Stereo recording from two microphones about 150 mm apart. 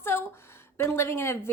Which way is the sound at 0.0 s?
15° left (ahead or behind).